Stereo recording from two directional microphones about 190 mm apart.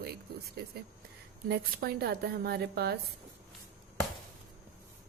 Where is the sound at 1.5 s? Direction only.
55° right (ahead or behind).